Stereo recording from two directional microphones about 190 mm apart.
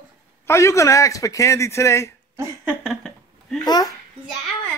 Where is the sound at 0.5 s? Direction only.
15° left (ahead or behind).